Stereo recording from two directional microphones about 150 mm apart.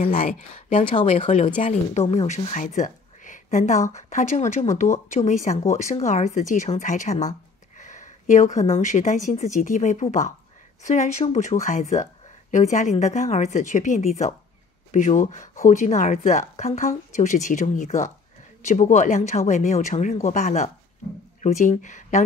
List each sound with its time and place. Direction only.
0.7 s speech: 40° left (ahead or behind)
0.9 s speech: 50° left (ahead or behind)